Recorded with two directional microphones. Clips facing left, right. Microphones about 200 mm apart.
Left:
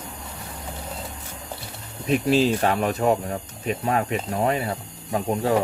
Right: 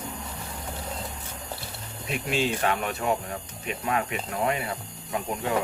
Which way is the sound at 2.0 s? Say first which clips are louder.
Left 8 dB; 35° left (ahead or behind).